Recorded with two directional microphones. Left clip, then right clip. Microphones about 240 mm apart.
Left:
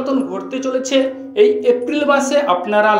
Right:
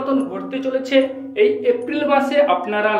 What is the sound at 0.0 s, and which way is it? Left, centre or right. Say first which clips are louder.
A woman's voice: left 2 dB; left.